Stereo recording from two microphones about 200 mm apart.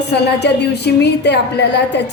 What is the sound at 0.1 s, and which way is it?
A woman's voice, 55° left (ahead or behind).